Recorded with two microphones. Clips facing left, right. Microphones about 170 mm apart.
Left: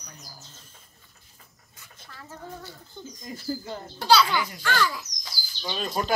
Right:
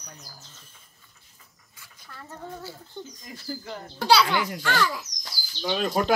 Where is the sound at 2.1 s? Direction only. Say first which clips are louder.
Right 2 dB; centre (ahead or behind).